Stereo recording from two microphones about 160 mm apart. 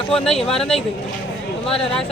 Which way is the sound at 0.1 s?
5° left (ahead or behind).